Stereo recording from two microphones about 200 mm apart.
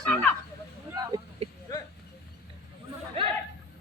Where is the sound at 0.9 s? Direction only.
20° right (ahead or behind).